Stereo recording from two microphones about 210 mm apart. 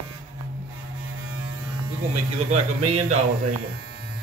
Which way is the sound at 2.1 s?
30° right (ahead or behind).